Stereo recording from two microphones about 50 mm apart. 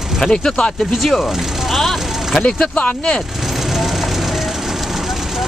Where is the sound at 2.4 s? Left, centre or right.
Left.